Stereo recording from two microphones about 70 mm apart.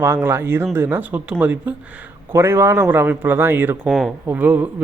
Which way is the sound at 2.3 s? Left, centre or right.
Right.